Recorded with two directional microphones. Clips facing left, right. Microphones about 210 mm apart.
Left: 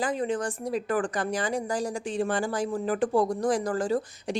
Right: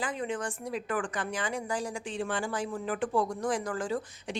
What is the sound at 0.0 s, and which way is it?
Speech, 35° left (ahead or behind).